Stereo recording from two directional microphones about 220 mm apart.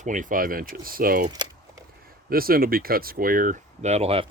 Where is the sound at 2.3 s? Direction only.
40° right (ahead or behind).